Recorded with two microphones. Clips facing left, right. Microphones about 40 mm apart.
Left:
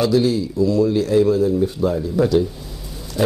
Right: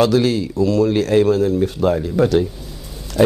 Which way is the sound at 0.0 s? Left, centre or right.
Right.